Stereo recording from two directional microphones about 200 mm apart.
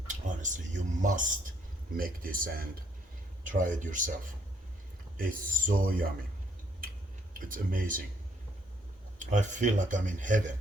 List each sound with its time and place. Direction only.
0.1 s speech: 40° right (ahead or behind)
5.1 s speech: 45° right (ahead or behind)
7.3 s speech: 45° right (ahead or behind)
9.1 s speech: 40° right (ahead or behind)